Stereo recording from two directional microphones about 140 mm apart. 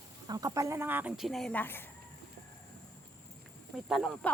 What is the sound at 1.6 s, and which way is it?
Speech, 15° left (ahead or behind).